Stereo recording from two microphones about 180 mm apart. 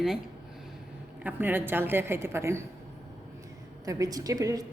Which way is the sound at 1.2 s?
10° right (ahead or behind).